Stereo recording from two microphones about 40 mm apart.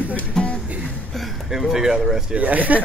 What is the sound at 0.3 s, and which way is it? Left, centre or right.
Music, centre.